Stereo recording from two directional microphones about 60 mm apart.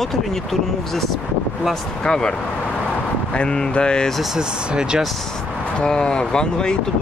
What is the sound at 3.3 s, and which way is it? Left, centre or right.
Speech, centre.